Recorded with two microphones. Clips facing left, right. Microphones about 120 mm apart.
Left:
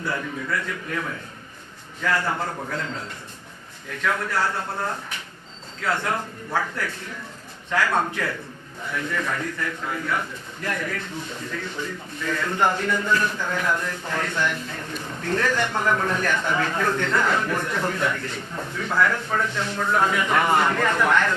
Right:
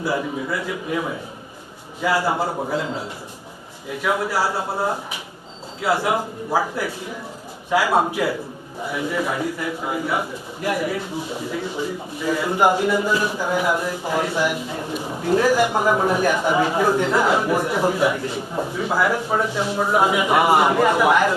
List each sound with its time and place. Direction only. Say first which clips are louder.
0.0 s a man's voice: right 5 dB; 15° right (ahead or behind)